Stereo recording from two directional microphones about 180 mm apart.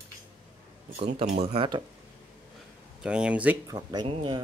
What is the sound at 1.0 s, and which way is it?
Speech, 35° right (ahead or behind).